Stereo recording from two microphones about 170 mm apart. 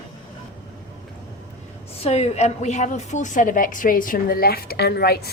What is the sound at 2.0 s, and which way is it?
A woman's voice, 40° left (ahead or behind).